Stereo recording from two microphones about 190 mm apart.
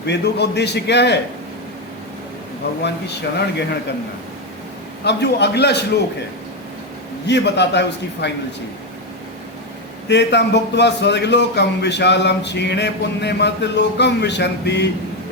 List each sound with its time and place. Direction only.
0.0 s a man's voice: 60° left (ahead or behind)
2.8 s a man's voice: 60° left (ahead or behind)
5.0 s a man's voice: 65° left (ahead or behind)
7.3 s a man's voice: 65° left (ahead or behind)
10.1 s a man's voice: 65° left (ahead or behind)